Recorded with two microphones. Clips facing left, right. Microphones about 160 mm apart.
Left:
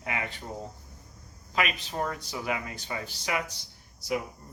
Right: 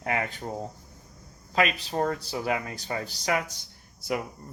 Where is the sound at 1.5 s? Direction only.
35° right (ahead or behind).